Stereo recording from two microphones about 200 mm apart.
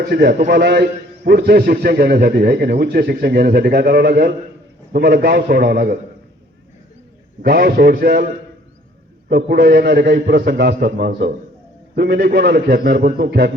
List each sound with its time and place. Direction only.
0.0 s a man's voice: 55° right (ahead or behind)
7.4 s a man's voice: 50° right (ahead or behind)
9.3 s a man's voice: 50° right (ahead or behind)